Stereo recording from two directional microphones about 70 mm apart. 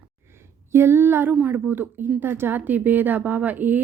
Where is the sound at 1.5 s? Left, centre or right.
Right.